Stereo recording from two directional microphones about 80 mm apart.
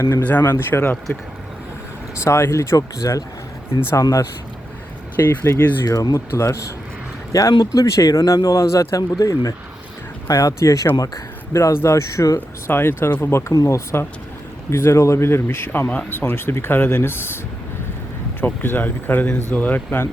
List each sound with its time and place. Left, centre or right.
0.2 s speech: centre
2.2 s speech: left
3.8 s speech: left
5.1 s speech: left
5.5 s speech: left
6.1 s speech: left
7.6 s speech: left
12.7 s speech: left
13.5 s speech: left